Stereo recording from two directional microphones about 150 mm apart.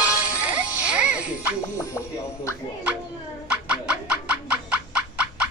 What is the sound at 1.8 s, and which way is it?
Music, 20° left (ahead or behind).